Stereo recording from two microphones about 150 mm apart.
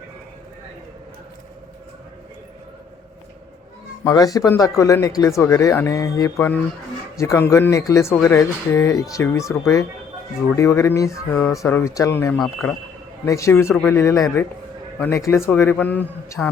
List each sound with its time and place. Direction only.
4.0 s a man's voice: 25° left (ahead or behind)
12.4 s a man's voice: centre (ahead or behind)
13.2 s a man's voice: 20° left (ahead or behind)